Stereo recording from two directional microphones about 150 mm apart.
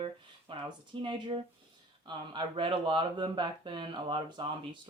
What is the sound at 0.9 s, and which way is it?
Speech, 35° right (ahead or behind).